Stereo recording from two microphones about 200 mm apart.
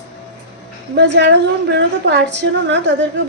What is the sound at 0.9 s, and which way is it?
A woman's voice, 60° right (ahead or behind).